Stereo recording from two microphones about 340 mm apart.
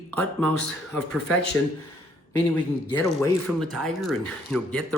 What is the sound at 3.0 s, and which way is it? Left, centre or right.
Speech, centre.